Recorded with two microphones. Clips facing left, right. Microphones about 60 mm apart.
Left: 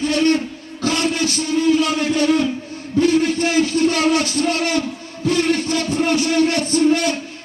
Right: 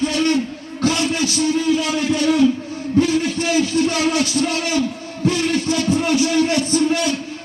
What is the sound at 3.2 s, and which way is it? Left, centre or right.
Music, left.